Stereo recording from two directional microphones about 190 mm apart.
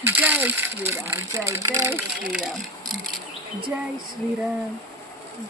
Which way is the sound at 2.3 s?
Centre (ahead or behind).